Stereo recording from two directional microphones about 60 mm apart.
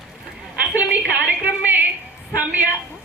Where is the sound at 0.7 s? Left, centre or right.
Right.